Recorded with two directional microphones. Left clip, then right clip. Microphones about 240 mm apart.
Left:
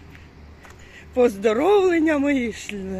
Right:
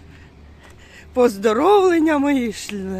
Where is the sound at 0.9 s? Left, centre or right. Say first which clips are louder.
Right 2 dB; centre.